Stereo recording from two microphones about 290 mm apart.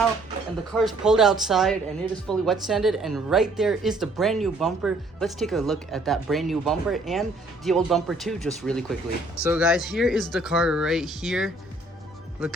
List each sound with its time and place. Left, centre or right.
0.7 s speech: centre